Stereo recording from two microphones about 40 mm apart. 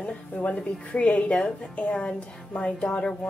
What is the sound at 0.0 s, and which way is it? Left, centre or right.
A woman's voice, left.